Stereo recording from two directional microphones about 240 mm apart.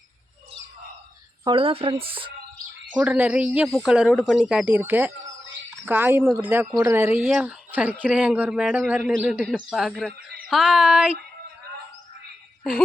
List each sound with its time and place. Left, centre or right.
1.5 s speech: right
2.9 s speech: centre